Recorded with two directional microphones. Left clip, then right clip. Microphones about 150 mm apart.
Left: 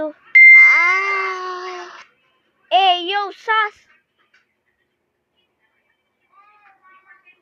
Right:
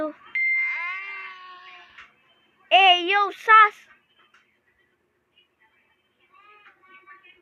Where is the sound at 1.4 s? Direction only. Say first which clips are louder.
Left 16 dB; 90° left.